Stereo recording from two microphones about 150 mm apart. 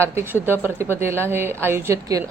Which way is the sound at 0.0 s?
15° right (ahead or behind).